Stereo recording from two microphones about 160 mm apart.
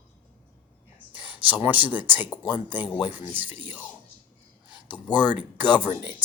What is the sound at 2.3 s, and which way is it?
Speech, 25° left (ahead or behind).